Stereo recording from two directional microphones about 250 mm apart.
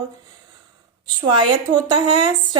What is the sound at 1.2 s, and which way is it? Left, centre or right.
A woman's voice, centre.